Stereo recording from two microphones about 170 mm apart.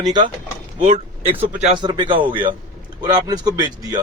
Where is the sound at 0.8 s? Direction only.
40° right (ahead or behind).